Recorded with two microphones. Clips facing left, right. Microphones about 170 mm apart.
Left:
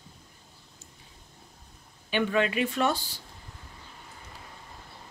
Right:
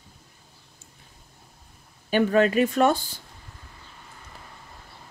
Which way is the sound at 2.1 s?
45° right (ahead or behind).